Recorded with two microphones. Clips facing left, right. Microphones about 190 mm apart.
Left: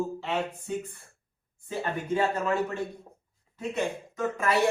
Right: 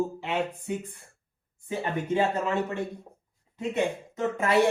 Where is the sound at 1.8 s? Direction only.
20° right (ahead or behind).